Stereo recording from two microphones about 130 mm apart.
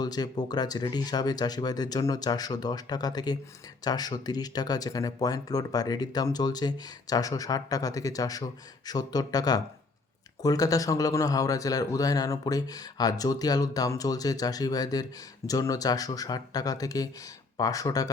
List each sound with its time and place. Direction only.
0.0 s speech: 30° left (ahead or behind)